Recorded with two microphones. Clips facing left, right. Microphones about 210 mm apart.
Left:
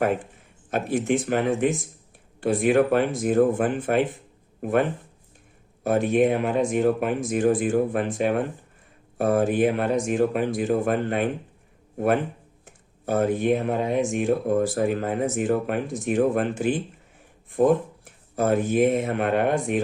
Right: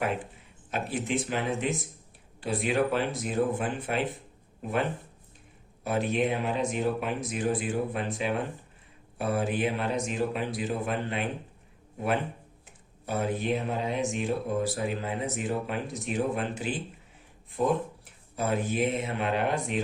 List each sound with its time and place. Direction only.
0.7 s speech: 50° left (ahead or behind)